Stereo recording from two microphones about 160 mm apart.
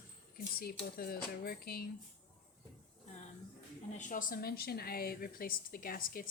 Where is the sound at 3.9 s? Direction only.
55° left (ahead or behind).